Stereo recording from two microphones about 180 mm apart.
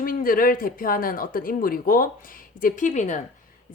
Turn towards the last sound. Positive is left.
turn(degrees=40)  # may be behind; listen again after turning